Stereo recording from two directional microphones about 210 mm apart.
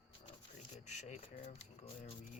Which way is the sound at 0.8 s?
35° left (ahead or behind).